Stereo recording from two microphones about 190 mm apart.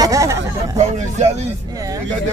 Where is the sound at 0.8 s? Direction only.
35° right (ahead or behind).